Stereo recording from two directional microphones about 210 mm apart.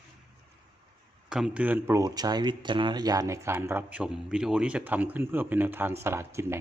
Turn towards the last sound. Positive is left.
turn(degrees=-10)  # may be behind; listen again after turning